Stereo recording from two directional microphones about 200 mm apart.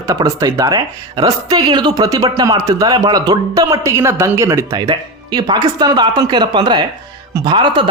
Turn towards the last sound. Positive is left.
turn(degrees=-20)  # may be behind; listen again after turning